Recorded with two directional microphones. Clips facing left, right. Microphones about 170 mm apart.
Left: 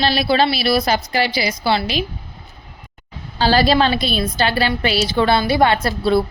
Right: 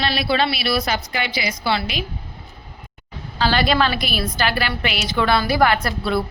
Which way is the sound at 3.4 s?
35° left (ahead or behind).